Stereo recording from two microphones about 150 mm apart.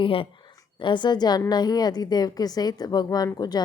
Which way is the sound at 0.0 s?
35° left (ahead or behind).